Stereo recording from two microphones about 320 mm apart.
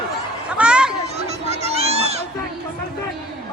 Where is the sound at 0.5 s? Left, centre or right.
Centre.